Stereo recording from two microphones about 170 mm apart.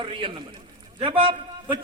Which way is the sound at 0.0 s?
30° right (ahead or behind).